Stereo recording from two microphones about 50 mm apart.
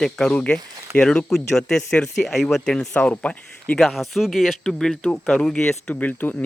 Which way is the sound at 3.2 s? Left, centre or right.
Left.